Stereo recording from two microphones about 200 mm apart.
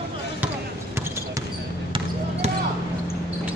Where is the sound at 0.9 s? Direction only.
10° right (ahead or behind).